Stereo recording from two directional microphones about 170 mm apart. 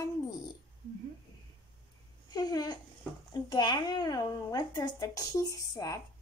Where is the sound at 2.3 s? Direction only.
25° left (ahead or behind).